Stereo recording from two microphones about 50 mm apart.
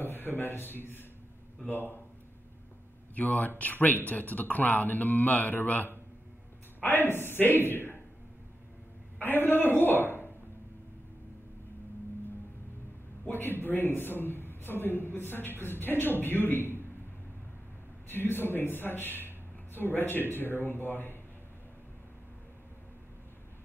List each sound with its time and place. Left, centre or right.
0.0 s speech: left
3.2 s a man's voice: left
9.2 s a man's voice: left
13.3 s a man's voice: left
18.1 s a man's voice: left